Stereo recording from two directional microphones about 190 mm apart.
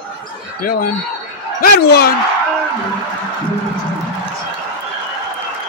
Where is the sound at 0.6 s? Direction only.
50° left (ahead or behind).